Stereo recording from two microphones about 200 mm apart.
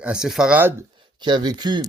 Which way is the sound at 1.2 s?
20° right (ahead or behind).